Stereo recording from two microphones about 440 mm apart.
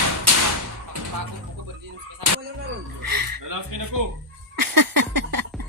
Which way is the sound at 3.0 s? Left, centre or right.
Right.